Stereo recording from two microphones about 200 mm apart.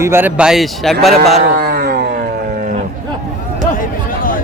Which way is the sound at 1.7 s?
50° right (ahead or behind).